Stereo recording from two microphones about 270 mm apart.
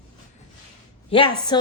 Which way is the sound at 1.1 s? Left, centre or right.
Centre.